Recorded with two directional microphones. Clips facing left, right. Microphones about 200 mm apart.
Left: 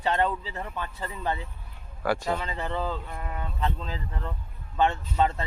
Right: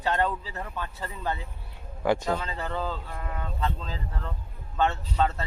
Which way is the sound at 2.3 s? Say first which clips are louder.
Even; 15° left (ahead or behind).